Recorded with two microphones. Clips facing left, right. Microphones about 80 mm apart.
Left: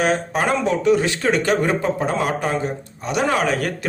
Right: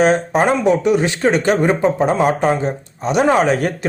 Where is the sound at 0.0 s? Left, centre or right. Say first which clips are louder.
Right 6 dB; right.